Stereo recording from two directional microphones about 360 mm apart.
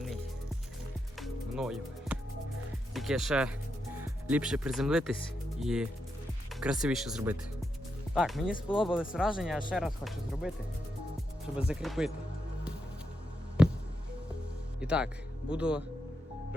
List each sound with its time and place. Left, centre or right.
1.2 s music: centre
2.9 s speech: centre
8.7 s speech: centre
9.0 s speech: centre
11.5 s speech: centre
13.6 s music: centre
14.8 s speech: centre